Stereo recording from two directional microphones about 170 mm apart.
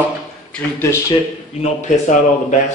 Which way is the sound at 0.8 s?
15° left (ahead or behind).